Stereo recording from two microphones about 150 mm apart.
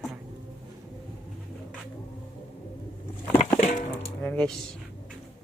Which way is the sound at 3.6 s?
55° left (ahead or behind).